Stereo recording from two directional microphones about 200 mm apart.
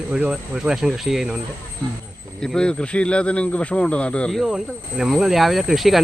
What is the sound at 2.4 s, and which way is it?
Speech, 5° left (ahead or behind).